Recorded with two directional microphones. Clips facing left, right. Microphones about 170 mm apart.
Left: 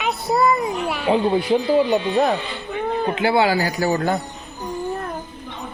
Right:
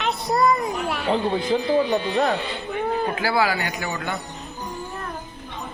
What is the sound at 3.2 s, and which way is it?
A man's voice, 25° left (ahead or behind).